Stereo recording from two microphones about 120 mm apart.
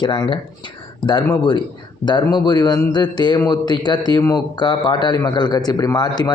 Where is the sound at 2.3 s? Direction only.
35° left (ahead or behind).